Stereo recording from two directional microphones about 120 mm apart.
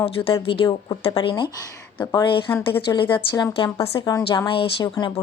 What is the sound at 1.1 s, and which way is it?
A woman's voice, 35° left (ahead or behind).